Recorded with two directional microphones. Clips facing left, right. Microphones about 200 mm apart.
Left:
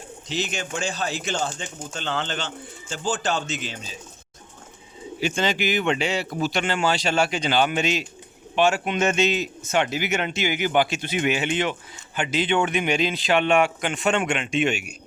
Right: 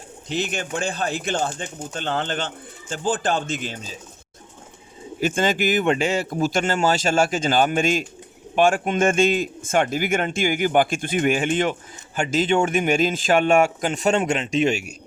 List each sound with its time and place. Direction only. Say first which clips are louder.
0.3 s a man's voice: right 3 dB; 55° right (ahead or behind)
5.2 s a man's voice: right 3 dB; 50° right (ahead or behind)